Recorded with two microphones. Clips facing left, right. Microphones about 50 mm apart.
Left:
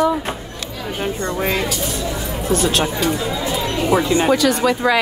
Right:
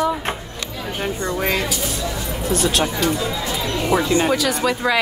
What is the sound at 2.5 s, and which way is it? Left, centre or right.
Speech, left.